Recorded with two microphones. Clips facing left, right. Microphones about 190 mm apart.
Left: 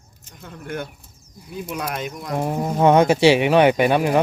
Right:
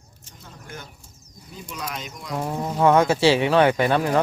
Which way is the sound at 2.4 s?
20° left (ahead or behind).